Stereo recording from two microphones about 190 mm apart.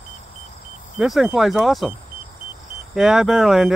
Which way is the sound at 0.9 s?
5° right (ahead or behind).